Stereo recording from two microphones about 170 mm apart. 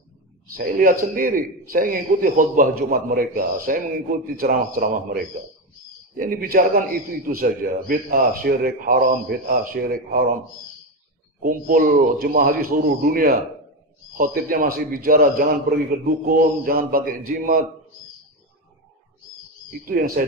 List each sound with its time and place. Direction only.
0.6 s a man's voice: 55° right (ahead or behind)
11.4 s a man's voice: 55° right (ahead or behind)
19.8 s a man's voice: 55° right (ahead or behind)